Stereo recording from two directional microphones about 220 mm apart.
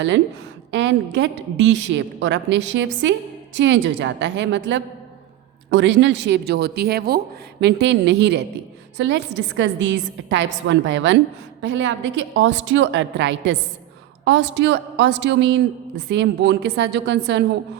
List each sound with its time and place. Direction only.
0.7 s a woman's voice: 55° right (ahead or behind)